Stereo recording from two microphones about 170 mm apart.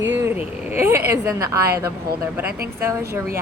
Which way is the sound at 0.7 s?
15° right (ahead or behind).